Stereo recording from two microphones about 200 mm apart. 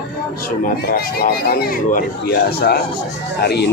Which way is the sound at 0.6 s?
50° left (ahead or behind).